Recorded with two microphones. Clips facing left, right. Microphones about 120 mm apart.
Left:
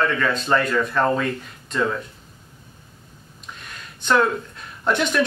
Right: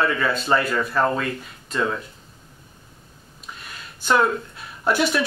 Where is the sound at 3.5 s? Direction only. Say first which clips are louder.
Even; 5° right (ahead or behind).